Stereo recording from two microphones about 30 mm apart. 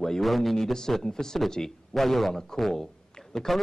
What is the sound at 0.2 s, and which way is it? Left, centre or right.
Speech, centre.